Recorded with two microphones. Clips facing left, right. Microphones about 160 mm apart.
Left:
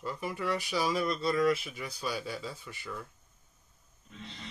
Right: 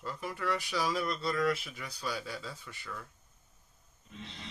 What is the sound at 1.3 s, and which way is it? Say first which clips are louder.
Speech: left 4 dB; 20° left (ahead or behind).